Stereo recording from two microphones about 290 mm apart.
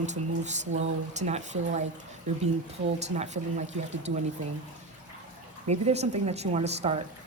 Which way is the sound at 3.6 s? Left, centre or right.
Right.